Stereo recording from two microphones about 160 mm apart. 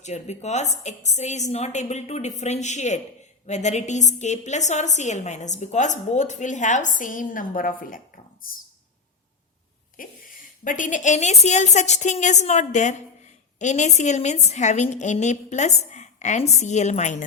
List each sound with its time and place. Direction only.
0.0 s a woman's voice: 45° left (ahead or behind); by 8.5 s 60° left (ahead or behind)
10.0 s a woman's voice: 60° left (ahead or behind)